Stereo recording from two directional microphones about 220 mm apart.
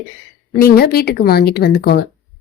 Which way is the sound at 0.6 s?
45° left (ahead or behind).